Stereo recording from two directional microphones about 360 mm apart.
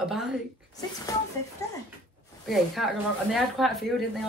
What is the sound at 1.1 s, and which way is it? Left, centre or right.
Speech, centre.